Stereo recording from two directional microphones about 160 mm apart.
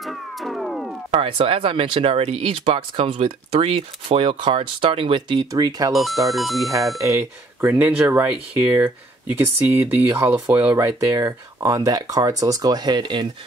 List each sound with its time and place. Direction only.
0.0 s cat: centre (ahead or behind)
1.1 s speech: 35° right (ahead or behind)
5.9 s speech: centre (ahead or behind)
7.6 s speech: 10° right (ahead or behind); by 13.3 s 30° right (ahead or behind)